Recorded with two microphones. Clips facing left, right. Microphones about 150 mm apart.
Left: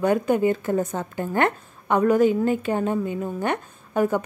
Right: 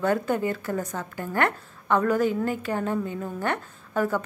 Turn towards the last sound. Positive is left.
turn(degrees=20)  # may be behind; listen again after turning